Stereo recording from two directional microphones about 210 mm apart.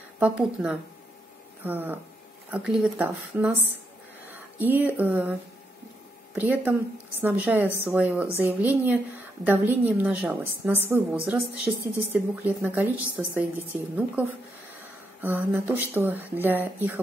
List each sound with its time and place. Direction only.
0.2 s a woman's voice: 5° right (ahead or behind)
15.1 s a woman's voice: 10° right (ahead or behind)